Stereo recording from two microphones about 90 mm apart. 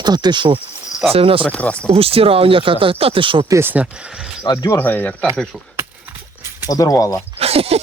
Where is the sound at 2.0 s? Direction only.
90° right; by 3.4 s 75° right (ahead or behind).